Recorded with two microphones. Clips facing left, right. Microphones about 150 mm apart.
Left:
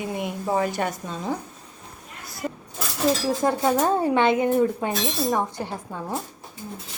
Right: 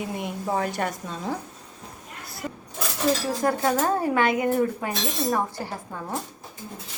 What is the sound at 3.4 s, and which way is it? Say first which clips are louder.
A woman's voice: left 2 dB; 20° left (ahead or behind).